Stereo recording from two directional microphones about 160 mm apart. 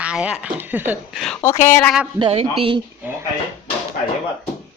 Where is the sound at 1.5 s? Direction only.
50° left (ahead or behind).